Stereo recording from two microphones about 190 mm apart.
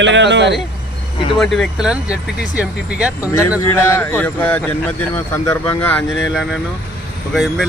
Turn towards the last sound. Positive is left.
turn(degrees=0)  # may be behind; listen again after turning